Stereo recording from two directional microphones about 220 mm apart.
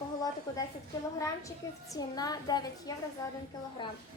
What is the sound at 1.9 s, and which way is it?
A woman's voice, 15° left (ahead or behind).